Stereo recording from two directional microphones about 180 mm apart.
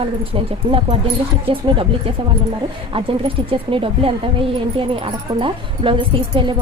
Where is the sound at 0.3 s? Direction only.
30° right (ahead or behind).